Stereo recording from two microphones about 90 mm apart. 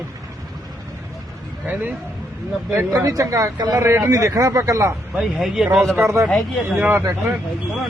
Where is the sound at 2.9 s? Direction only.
35° right (ahead or behind).